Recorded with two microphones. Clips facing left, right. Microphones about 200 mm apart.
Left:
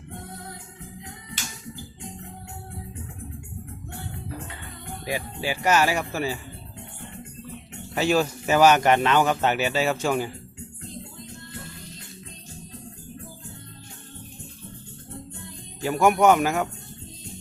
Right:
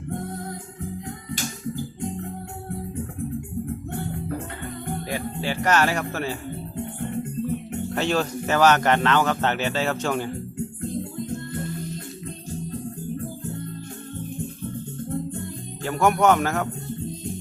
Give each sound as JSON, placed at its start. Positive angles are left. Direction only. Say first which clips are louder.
{"t": 1.3, "sound": "music", "louder": "right 10 dB", "side_deg": -45}
{"t": 3.9, "sound": "music", "louder": "right 5 dB", "side_deg": -50}
{"t": 5.1, "sound": "speech", "louder": "even", "side_deg": 10}
{"t": 6.7, "sound": "music", "louder": "right 15 dB", "side_deg": -50}
{"t": 7.9, "sound": "speech", "louder": "left 2 dB", "side_deg": 5}
{"t": 10.8, "sound": "music", "louder": "right 10 dB", "side_deg": -50}
{"t": 15.8, "sound": "speech", "louder": "left 1 dB", "side_deg": 10}